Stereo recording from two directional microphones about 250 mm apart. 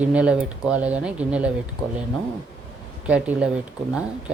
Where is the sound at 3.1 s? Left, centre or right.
Centre.